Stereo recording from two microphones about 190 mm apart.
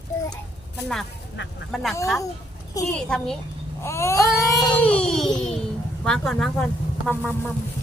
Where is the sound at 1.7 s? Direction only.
Centre (ahead or behind).